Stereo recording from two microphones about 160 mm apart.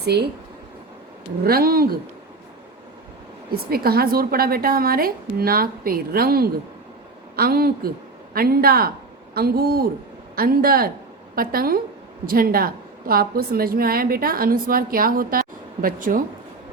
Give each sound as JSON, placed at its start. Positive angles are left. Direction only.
{"t": 0.0, "sound": "speech", "side_deg": -90}
{"t": 1.5, "sound": "a woman's voice", "side_deg": -70}
{"t": 3.5, "sound": "a woman's voice", "side_deg": -70}